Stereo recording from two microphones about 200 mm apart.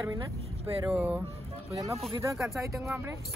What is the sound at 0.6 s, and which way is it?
Speech, 10° right (ahead or behind).